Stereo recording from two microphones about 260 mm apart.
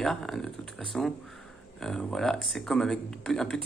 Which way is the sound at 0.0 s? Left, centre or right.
Centre.